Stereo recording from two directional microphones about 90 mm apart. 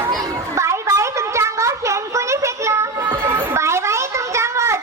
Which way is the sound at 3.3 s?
30° right (ahead or behind).